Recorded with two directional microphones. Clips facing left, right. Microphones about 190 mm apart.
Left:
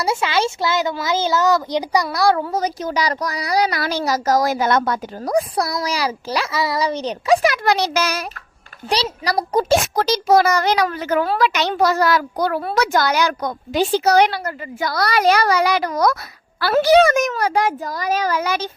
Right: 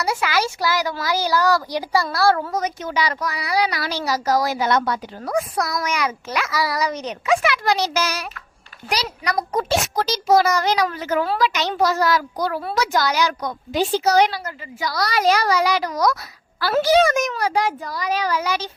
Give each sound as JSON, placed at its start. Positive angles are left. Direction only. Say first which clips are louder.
{"t": 0.0, "sound": "a woman's voice", "louder": "left 2 dB", "side_deg": 25}
{"t": 2.5, "sound": "speech", "louder": "left 3 dB", "side_deg": 30}
{"t": 7.6, "sound": "a child's voice", "louder": "left 2 dB", "side_deg": 60}
{"t": 8.9, "sound": "speech", "louder": "left 4 dB", "side_deg": 30}
{"t": 9.9, "sound": "a child's voice", "louder": "right 1 dB", "side_deg": 60}